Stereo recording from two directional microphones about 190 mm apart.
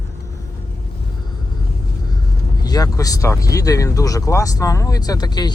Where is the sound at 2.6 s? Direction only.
20° left (ahead or behind).